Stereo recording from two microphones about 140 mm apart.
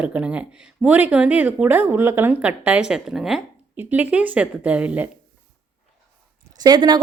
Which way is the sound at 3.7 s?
15° right (ahead or behind).